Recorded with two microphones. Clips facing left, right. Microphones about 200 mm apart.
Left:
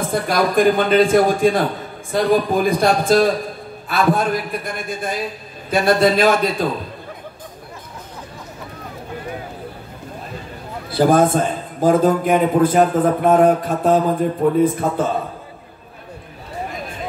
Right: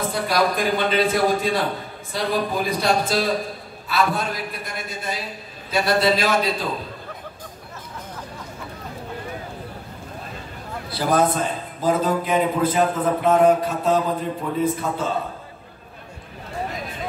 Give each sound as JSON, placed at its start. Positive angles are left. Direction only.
{"t": 0.1, "sound": "a man's voice", "side_deg": 50}
{"t": 10.9, "sound": "a man's voice", "side_deg": 50}